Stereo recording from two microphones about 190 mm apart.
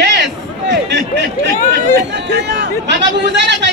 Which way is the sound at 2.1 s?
65° right (ahead or behind).